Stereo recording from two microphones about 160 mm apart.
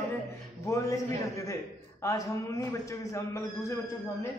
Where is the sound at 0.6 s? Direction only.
20° left (ahead or behind).